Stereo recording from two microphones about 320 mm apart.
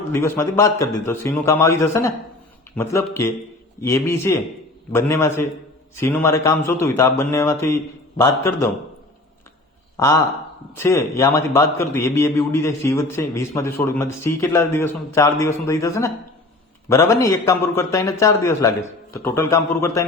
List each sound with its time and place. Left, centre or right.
0.1 s a man's voice: centre
10.8 s a man's voice: centre